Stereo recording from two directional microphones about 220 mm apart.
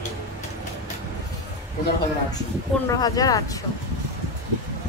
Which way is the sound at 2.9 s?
15° left (ahead or behind).